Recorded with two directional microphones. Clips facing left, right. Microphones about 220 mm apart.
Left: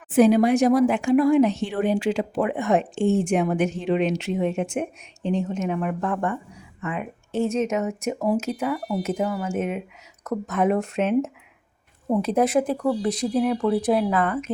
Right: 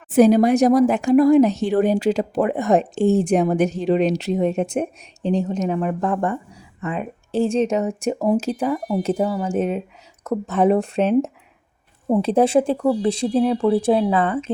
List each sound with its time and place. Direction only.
0.1 s speech: 40° right (ahead or behind)